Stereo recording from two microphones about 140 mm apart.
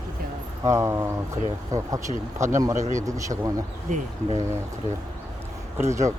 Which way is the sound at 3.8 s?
60° right (ahead or behind).